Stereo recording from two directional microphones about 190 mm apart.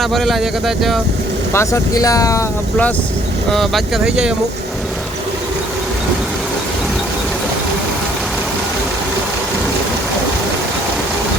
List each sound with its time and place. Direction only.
0.0 s speech: centre (ahead or behind)
1.5 s speech: 15° left (ahead or behind)
3.5 s speech: centre (ahead or behind)